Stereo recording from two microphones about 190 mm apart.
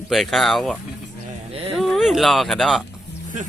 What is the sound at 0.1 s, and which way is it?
Speech, centre (ahead or behind).